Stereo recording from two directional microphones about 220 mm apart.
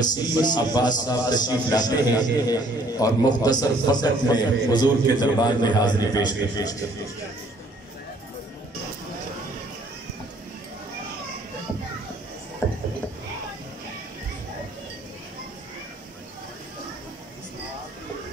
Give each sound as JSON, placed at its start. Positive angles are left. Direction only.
{"t": 0.0, "sound": "a man's voice", "side_deg": 20}